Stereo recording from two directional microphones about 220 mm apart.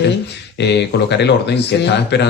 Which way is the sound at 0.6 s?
50° left (ahead or behind).